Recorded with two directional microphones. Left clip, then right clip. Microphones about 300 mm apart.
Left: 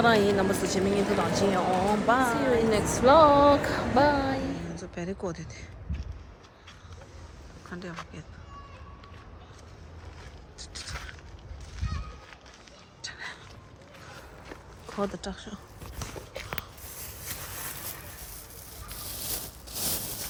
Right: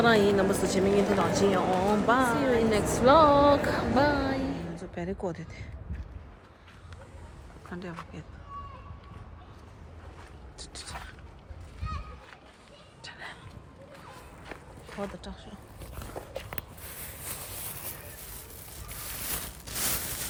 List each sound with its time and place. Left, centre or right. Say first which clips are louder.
0.0 s speech: even; centre
7.7 s speech: left 1 dB; centre
13.0 s a sound: left 3 dB; centre
14.9 s speech: left 6 dB; centre